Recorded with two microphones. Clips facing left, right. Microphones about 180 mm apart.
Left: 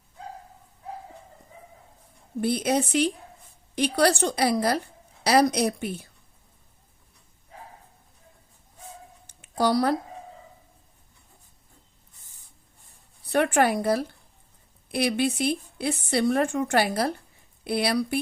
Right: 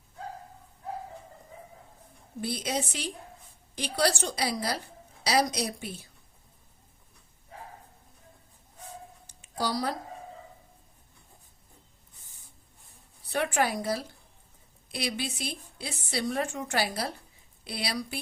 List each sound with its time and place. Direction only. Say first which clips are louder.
2.4 s a woman's voice: left 8 dB; 60° left (ahead or behind)
9.2 s a sound: left 8 dB; 60° left (ahead or behind)
13.2 s a woman's voice: left 6 dB; 60° left (ahead or behind)